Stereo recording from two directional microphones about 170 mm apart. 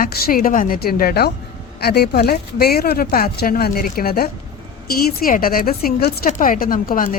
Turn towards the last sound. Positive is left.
turn(degrees=55)  # may be behind; listen again after turning